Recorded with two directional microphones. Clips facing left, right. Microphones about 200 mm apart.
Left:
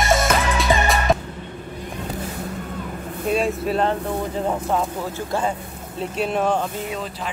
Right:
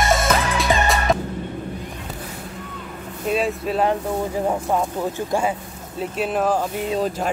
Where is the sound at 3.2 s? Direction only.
Centre (ahead or behind).